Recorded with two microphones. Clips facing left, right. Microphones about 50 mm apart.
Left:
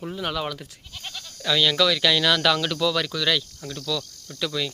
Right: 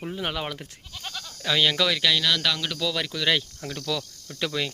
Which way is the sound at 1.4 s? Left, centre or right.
Centre.